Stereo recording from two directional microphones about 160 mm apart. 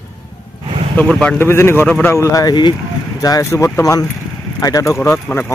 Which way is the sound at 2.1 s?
20° left (ahead or behind).